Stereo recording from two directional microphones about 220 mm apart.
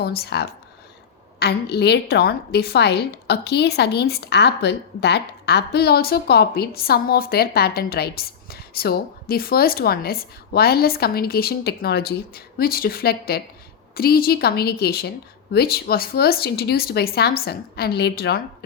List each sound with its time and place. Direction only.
0.0 s a woman's voice: 45° left (ahead or behind)